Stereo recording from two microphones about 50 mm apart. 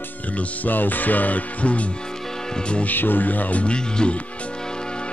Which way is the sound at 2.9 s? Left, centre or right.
Left.